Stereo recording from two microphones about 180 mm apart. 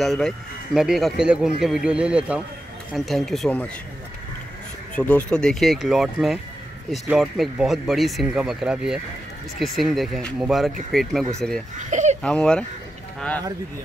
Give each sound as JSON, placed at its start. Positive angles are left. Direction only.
{"t": 0.0, "sound": "speech", "side_deg": 0}
{"t": 4.9, "sound": "speech", "side_deg": 10}
{"t": 11.8, "sound": "a sound", "side_deg": -40}
{"t": 12.2, "sound": "speech", "side_deg": 5}